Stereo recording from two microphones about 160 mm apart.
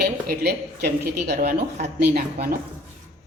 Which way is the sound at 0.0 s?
80° right.